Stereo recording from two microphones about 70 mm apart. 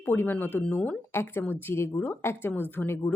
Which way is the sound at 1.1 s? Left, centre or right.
Left.